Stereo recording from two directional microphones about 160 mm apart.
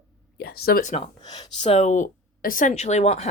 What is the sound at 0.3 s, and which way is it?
Speech, 80° left.